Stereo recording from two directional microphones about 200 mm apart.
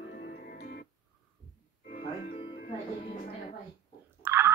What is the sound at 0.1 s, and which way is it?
Music, 55° left (ahead or behind).